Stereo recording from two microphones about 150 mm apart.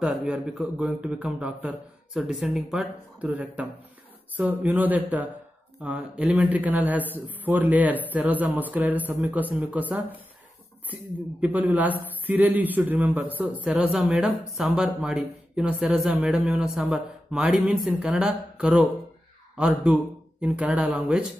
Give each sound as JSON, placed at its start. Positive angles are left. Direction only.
{"t": 0.0, "sound": "a man's voice", "side_deg": -5}
{"t": 11.4, "sound": "a man's voice", "side_deg": -10}